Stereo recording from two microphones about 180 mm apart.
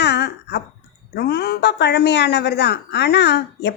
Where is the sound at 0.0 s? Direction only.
70° left (ahead or behind).